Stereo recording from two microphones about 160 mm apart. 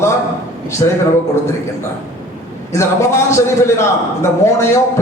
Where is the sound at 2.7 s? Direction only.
15° left (ahead or behind).